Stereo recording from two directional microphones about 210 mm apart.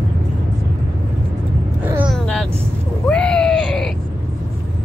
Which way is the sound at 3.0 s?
5° left (ahead or behind).